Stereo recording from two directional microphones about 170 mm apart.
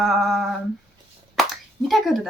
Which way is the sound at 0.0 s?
Centre (ahead or behind).